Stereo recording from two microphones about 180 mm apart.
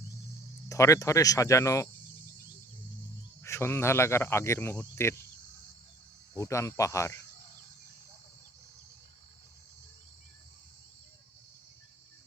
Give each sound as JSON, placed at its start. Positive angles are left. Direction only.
{"t": 0.7, "sound": "cricket", "side_deg": 15}
{"t": 3.4, "sound": "cricket", "side_deg": 15}
{"t": 6.3, "sound": "cricket", "side_deg": 20}